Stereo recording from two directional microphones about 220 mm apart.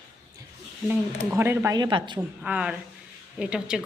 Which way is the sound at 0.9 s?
10° right (ahead or behind).